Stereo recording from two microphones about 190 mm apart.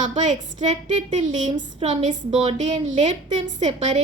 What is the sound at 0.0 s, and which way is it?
A woman's voice, 40° right (ahead or behind).